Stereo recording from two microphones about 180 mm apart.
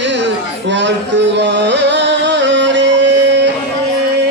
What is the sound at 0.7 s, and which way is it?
Music, 80° right.